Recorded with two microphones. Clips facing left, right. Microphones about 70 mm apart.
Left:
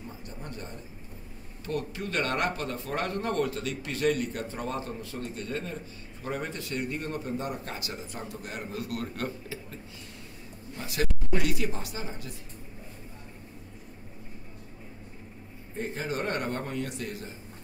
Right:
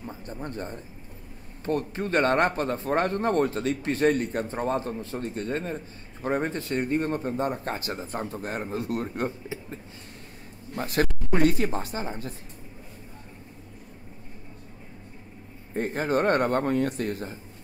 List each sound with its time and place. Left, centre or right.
0.0 s a sound: right
1.6 s speech: right
10.8 s speech: right
15.7 s a man's voice: right